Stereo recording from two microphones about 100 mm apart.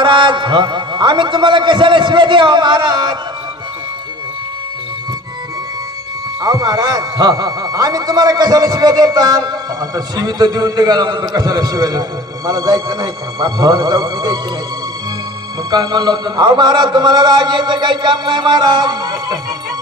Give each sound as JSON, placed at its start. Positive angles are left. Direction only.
{"t": 0.0, "sound": "a man's voice", "side_deg": -50}
{"t": 6.4, "sound": "a man's voice", "side_deg": -35}
{"t": 15.7, "sound": "a man's voice", "side_deg": -45}